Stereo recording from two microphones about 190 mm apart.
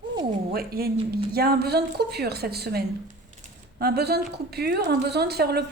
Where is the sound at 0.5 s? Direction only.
55° right (ahead or behind).